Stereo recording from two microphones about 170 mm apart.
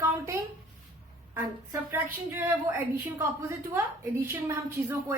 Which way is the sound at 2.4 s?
15° right (ahead or behind).